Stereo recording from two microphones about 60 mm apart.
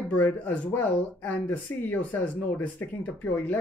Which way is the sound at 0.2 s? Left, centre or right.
Left.